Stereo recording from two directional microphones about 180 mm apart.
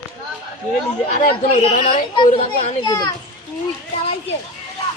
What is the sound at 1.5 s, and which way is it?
Speech, 40° left (ahead or behind).